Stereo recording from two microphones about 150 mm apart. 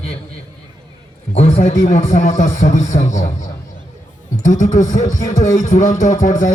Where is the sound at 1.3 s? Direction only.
45° left (ahead or behind).